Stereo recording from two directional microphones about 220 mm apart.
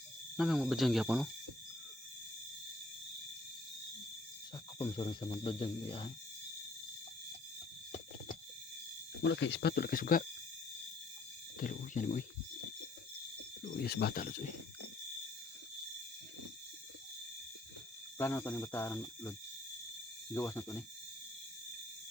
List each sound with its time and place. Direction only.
0.3 s speech: centre (ahead or behind)
4.8 s speech: 20° left (ahead or behind)
9.2 s speech: 55° left (ahead or behind)
11.6 s speech: 40° left (ahead or behind)
13.6 s speech: 45° left (ahead or behind)
18.2 s speech: 10° left (ahead or behind)
20.3 s speech: 15° left (ahead or behind)